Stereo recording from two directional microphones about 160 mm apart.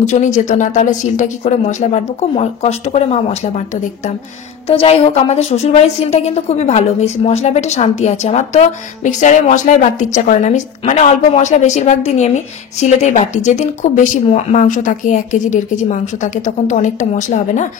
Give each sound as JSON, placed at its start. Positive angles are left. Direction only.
{"t": 0.0, "sound": "a woman's voice", "side_deg": 50}